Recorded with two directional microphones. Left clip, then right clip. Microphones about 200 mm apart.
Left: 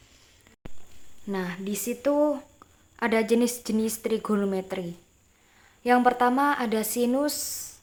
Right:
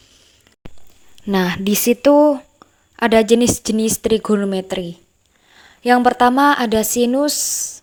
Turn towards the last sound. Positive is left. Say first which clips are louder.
# right 10 dB
turn(degrees=-30)  # may be behind; listen again after turning